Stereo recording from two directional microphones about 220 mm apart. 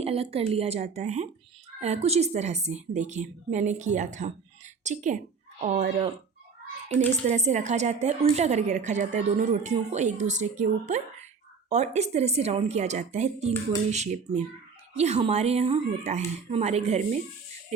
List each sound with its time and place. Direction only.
0.0 s a woman's voice: 25° right (ahead or behind)
7.3 s a woman's voice: 30° right (ahead or behind)